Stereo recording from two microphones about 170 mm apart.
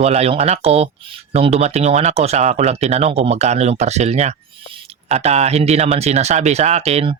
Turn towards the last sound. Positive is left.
turn(degrees=-40)  # may be behind; listen again after turning